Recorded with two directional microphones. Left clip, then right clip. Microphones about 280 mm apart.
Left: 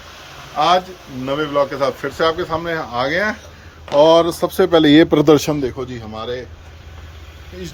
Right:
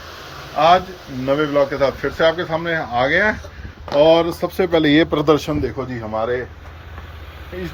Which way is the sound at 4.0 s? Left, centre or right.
Left.